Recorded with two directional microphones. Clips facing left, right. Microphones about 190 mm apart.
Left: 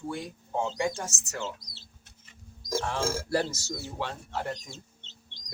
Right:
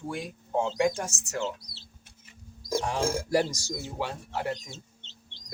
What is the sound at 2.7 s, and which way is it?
Speech, 15° right (ahead or behind).